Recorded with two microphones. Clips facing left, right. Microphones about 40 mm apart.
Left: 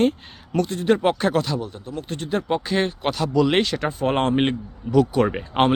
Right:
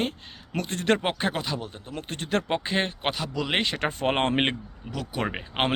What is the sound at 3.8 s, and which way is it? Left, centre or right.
Speech, right.